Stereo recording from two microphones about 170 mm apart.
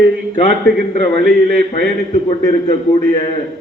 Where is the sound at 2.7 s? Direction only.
35° left (ahead or behind).